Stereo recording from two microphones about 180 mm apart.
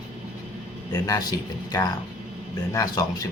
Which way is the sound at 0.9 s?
20° left (ahead or behind).